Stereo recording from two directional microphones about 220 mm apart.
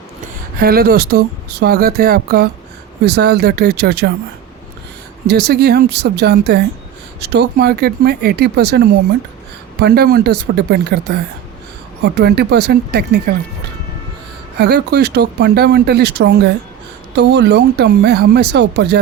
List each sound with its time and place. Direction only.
0.6 s speech: 45° right (ahead or behind)
5.3 s speech: 45° right (ahead or behind)
14.6 s speech: 50° right (ahead or behind)